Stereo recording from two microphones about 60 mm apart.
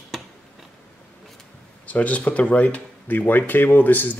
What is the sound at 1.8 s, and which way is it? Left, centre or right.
Speech, left.